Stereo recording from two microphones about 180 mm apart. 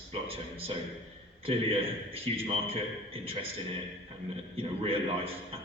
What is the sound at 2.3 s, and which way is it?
Speech, 30° right (ahead or behind).